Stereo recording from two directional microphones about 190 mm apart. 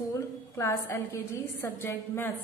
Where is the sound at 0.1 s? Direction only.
15° left (ahead or behind).